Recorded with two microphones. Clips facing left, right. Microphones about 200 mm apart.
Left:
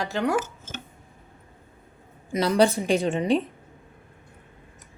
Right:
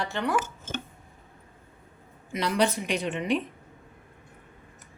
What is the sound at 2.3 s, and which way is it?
A woman's voice, 40° left (ahead or behind).